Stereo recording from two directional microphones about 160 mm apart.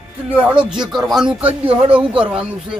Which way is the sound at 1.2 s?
35° right (ahead or behind).